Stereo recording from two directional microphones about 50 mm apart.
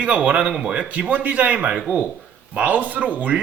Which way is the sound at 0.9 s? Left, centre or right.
Right.